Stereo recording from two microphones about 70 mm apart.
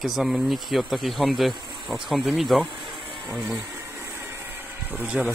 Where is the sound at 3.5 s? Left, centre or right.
Right.